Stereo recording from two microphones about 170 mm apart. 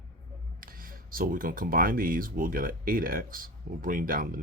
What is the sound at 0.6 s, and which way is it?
Speech, 55° right (ahead or behind).